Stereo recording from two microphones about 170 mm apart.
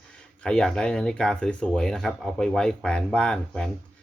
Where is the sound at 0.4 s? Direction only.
5° left (ahead or behind).